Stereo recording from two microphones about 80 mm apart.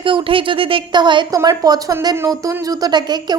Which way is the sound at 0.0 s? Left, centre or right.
Right.